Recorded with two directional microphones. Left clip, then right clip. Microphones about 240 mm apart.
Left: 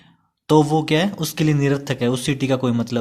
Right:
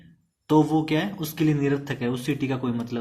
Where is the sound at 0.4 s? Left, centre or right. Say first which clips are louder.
Left 5 dB; left.